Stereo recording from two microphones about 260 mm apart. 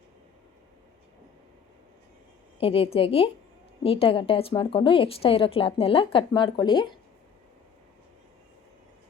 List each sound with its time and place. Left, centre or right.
2.6 s a woman's voice: left